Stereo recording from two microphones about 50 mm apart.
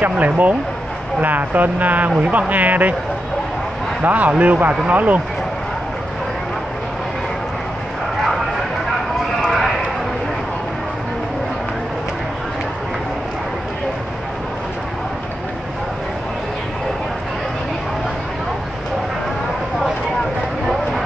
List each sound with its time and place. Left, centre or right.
0.0 s speech: right
4.0 s speech: right